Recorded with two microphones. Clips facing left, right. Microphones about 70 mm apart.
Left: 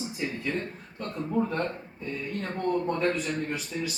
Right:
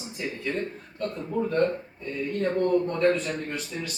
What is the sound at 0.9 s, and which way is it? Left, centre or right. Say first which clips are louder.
Speech: even; centre.